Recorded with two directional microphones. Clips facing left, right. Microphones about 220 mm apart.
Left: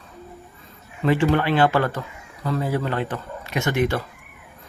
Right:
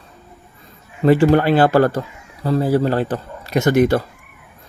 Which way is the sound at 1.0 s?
40° right (ahead or behind).